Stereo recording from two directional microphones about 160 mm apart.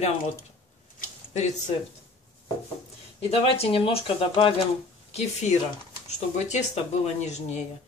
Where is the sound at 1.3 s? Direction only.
45° left (ahead or behind).